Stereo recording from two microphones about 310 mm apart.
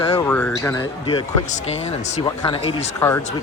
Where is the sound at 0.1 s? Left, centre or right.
Centre.